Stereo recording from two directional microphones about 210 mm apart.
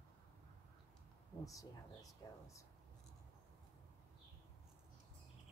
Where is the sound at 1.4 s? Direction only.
15° left (ahead or behind).